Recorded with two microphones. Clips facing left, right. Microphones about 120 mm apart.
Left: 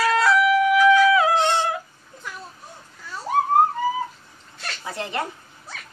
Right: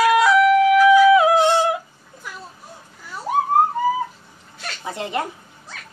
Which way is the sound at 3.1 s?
15° right (ahead or behind).